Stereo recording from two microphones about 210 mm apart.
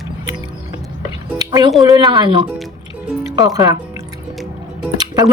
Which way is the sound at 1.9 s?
20° right (ahead or behind).